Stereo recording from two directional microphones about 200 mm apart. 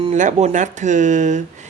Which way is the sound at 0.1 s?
35° right (ahead or behind).